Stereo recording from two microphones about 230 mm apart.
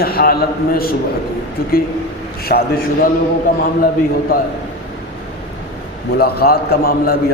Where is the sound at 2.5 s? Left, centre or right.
Left.